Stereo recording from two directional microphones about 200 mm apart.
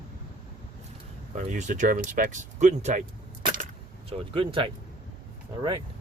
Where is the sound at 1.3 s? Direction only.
40° right (ahead or behind).